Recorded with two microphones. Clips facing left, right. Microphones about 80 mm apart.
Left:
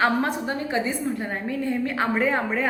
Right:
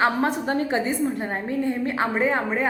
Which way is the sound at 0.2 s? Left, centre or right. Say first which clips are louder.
Right 3 dB; right.